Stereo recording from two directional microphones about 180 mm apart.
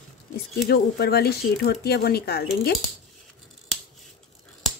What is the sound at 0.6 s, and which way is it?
A woman's voice, 60° left (ahead or behind).